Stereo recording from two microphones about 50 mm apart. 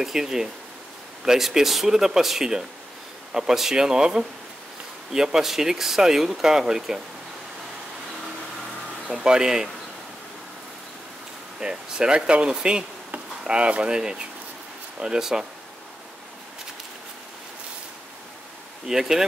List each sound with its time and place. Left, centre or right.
0.0 s speech: centre
9.2 s speech: centre
11.6 s speech: centre
18.9 s speech: centre